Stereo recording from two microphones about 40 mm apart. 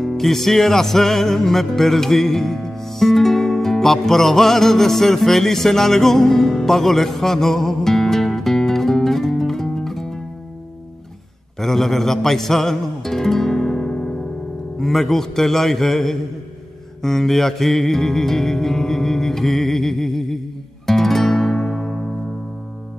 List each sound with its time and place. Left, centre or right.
0.0 s music: centre
11.6 s music: centre
14.8 s a man's voice: centre
17.0 s music: centre